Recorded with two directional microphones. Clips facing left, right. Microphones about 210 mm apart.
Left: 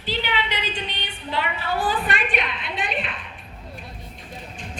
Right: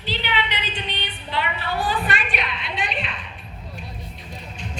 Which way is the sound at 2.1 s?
50° left (ahead or behind).